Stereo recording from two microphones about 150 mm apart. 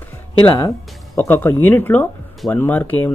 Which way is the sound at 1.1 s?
15° left (ahead or behind).